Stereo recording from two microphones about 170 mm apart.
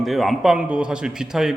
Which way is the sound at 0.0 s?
Centre (ahead or behind).